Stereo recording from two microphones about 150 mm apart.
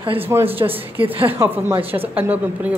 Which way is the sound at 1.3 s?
15° right (ahead or behind).